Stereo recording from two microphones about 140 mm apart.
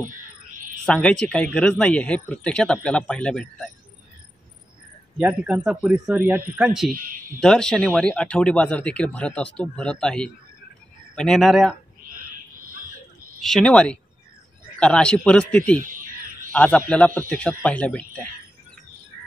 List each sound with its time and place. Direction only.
0.8 s speech: 5° left (ahead or behind)
5.1 s speech: 5° right (ahead or behind)
6.9 s a man's voice: 80° right
7.3 s speech: 5° left (ahead or behind)
13.4 s speech: 5° left (ahead or behind)
15.8 s a sound: 75° right (ahead or behind)
16.5 s speech: 10° left (ahead or behind)